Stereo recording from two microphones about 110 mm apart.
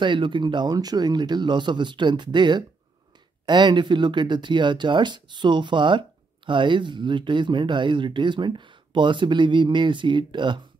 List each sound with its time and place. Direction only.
0.0 s speech: 45° right (ahead or behind)